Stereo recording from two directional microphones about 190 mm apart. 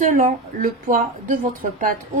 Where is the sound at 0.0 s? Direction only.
45° right (ahead or behind).